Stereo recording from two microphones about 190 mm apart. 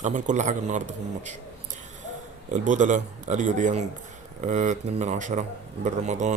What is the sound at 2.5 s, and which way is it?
A man's voice, 40° right (ahead or behind).